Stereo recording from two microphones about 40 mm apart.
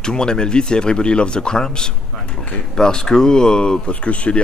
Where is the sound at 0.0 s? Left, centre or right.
Centre.